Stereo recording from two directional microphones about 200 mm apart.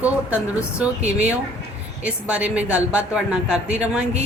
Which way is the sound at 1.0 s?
35° right (ahead or behind).